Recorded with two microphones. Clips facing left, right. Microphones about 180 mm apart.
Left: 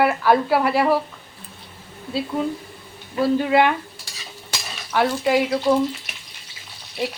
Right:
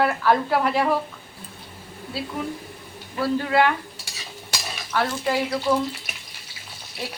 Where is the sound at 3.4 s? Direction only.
20° left (ahead or behind).